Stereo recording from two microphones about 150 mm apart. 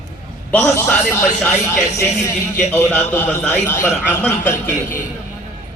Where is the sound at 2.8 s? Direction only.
15° left (ahead or behind).